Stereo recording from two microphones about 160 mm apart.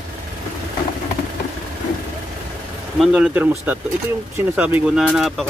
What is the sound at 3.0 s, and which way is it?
Speech, 5° right (ahead or behind).